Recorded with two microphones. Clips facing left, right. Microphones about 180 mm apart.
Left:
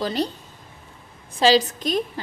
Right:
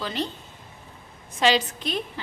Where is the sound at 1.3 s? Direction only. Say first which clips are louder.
Left 4 dB; 35° left (ahead or behind).